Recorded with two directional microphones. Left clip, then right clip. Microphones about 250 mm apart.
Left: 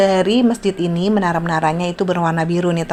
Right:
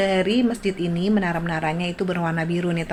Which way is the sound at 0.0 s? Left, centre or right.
Left.